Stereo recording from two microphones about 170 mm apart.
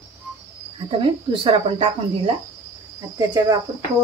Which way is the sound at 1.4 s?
35° right (ahead or behind).